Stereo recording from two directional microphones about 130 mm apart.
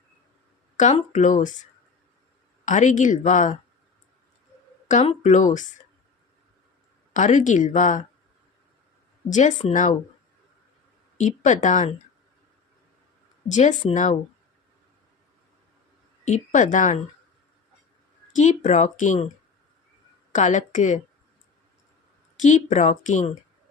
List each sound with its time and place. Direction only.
0.8 s speech: 70° left (ahead or behind)
2.6 s speech: 70° left (ahead or behind)
5.0 s speech: 65° left (ahead or behind)
7.1 s speech: 70° left (ahead or behind)
9.3 s speech: 70° left (ahead or behind)
11.2 s speech: 70° left (ahead or behind)
13.5 s speech: 65° left (ahead or behind)
16.2 s a woman's voice: 70° left (ahead or behind)
18.3 s speech: 65° left (ahead or behind)
20.3 s speech: 70° left (ahead or behind)
22.4 s speech: 70° left (ahead or behind)